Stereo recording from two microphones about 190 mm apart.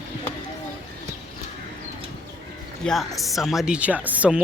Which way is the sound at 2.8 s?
Centre (ahead or behind).